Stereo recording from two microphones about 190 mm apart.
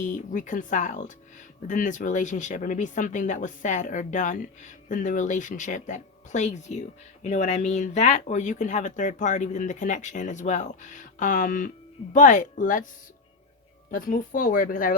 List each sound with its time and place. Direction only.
0.0 s speech: 40° left (ahead or behind)
13.9 s speech: 45° left (ahead or behind)